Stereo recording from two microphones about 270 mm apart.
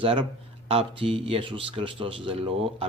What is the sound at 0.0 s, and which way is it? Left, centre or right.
A man's voice, centre.